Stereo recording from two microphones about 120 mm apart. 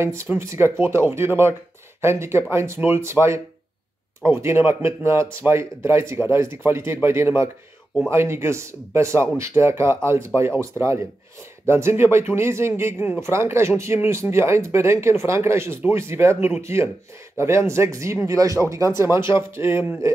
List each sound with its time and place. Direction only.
0.0 s speech: 25° right (ahead or behind)